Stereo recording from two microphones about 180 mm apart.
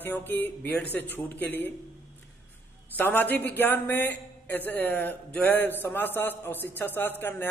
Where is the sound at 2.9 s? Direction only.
10° left (ahead or behind).